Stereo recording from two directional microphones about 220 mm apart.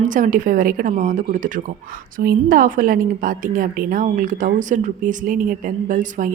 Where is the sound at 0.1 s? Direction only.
35° right (ahead or behind).